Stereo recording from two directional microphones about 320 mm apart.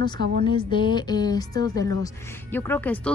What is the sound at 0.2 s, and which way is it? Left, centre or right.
Speech, right.